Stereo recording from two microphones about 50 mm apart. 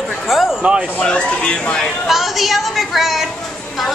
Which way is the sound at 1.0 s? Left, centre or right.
Centre.